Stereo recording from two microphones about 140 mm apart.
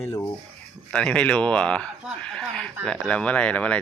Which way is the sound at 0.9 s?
10° left (ahead or behind).